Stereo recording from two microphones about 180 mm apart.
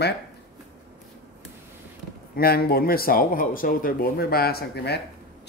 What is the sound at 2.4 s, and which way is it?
Speech, 60° left (ahead or behind).